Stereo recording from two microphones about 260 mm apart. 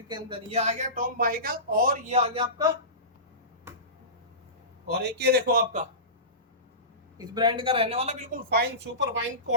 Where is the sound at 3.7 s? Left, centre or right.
Centre.